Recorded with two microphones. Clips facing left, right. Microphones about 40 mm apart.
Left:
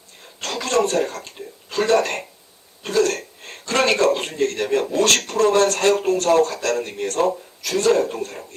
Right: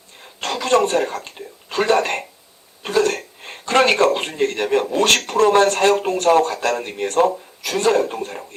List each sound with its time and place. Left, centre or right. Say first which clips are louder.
0.3 s a sound: right 3 dB; centre
0.9 s a man's voice: right 2 dB; centre
5.5 s a man's voice: right 2 dB; right